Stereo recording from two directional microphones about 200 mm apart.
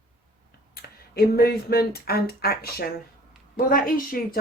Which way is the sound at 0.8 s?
50° left (ahead or behind).